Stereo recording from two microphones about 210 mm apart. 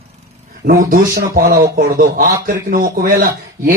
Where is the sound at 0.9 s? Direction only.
40° right (ahead or behind).